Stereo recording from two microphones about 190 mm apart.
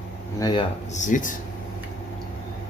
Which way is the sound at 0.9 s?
40° left (ahead or behind).